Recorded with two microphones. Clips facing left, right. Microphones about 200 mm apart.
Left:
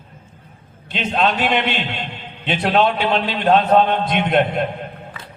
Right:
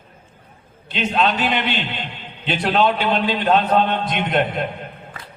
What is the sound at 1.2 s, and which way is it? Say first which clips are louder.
A man's voice: left 2 dB; 50° left (ahead or behind).